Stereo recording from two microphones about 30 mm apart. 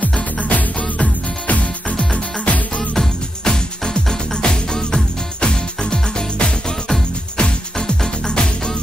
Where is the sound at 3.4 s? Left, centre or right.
Left.